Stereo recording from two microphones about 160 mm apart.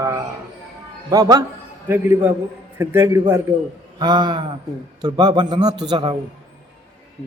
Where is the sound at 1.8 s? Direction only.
10° right (ahead or behind).